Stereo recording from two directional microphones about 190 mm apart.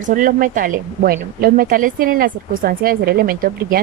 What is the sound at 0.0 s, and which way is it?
A woman's voice, 45° right (ahead or behind).